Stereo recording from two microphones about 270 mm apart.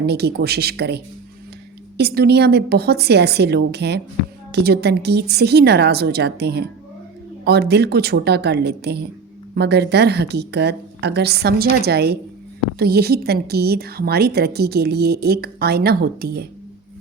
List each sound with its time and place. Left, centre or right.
0.0 s a woman's voice: right